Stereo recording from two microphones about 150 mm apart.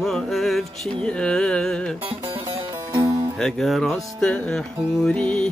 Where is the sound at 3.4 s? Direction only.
5° left (ahead or behind).